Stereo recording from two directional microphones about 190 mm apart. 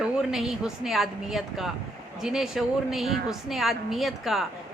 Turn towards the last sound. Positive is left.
turn(degrees=0)  # may be behind; listen again after turning